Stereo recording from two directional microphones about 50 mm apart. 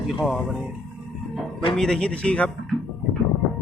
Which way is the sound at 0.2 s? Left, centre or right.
Centre.